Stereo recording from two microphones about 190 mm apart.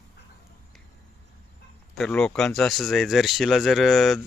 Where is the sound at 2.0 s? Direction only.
5° left (ahead or behind).